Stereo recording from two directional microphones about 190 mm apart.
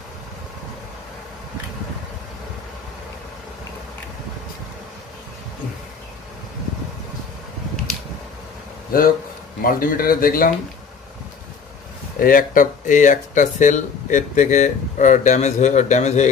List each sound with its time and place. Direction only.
8.9 s speech: 50° left (ahead or behind)
12.2 s speech: 45° left (ahead or behind)